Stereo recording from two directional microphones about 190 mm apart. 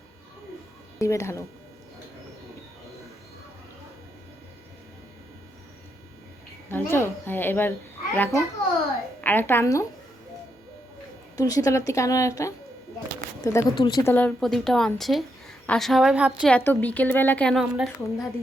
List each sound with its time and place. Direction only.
0.9 s a woman's voice: 15° left (ahead or behind)
6.7 s a woman's voice: 10° left (ahead or behind)
11.3 s a woman's voice: 20° left (ahead or behind)
14.1 s a woman's voice: 5° left (ahead or behind)
16.5 s a woman's voice: 10° left (ahead or behind)